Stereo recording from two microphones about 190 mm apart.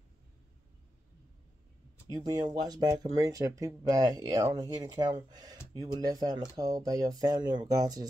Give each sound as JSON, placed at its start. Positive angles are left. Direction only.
{"t": 2.0, "sound": "speech", "side_deg": -20}